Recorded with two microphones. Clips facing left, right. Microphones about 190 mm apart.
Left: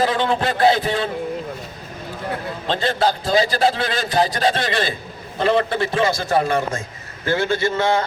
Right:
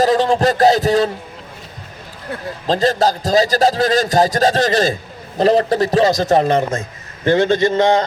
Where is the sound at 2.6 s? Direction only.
40° right (ahead or behind).